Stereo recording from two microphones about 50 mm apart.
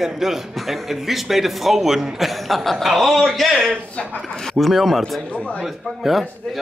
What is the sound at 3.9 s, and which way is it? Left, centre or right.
Speech, centre.